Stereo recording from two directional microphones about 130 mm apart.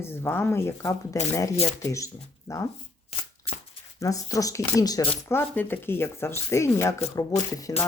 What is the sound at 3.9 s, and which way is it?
A woman's voice, 25° left (ahead or behind).